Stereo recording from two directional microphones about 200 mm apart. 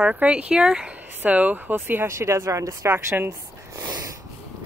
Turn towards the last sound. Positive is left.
turn(degrees=-15)  # may be behind; listen again after turning